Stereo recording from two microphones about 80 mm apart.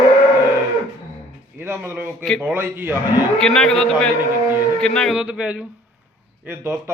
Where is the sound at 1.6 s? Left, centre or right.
Right.